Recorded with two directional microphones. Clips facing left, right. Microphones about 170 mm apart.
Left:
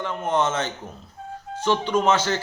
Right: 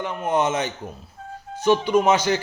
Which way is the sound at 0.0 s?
10° right (ahead or behind).